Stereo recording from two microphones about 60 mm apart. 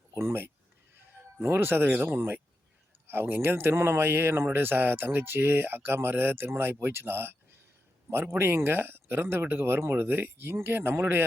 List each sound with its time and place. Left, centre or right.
0.2 s speech: right
0.9 s music: right
1.9 s speech: right